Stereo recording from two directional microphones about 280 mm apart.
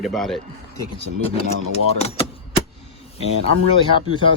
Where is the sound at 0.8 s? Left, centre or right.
Left.